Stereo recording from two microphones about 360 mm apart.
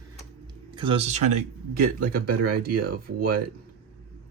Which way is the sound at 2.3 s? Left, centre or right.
Right.